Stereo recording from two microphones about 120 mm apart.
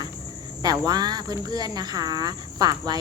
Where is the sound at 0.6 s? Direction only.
35° right (ahead or behind).